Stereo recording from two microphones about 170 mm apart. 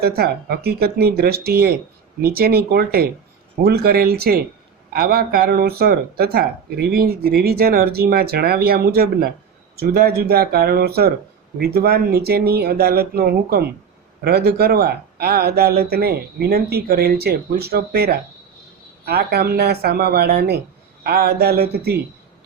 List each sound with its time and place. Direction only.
0.0 s speech: 65° right (ahead or behind)